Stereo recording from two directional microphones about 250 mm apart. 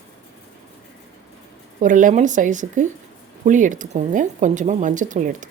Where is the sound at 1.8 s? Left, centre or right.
Right.